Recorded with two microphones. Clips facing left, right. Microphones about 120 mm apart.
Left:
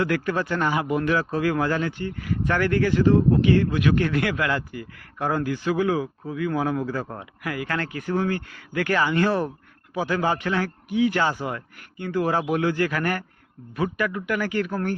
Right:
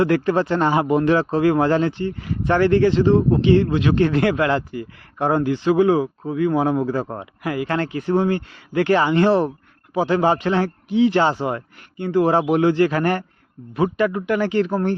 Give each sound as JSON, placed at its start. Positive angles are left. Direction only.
{"t": 0.0, "sound": "speech", "side_deg": -30}